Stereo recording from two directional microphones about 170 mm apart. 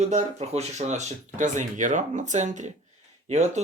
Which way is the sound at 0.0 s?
40° right (ahead or behind).